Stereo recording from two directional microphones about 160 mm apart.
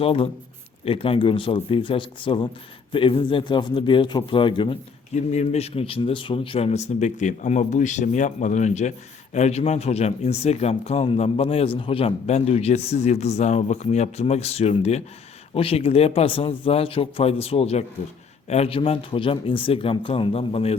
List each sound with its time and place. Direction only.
0.0 s speech: 35° left (ahead or behind)
5.1 s speech: 45° left (ahead or behind)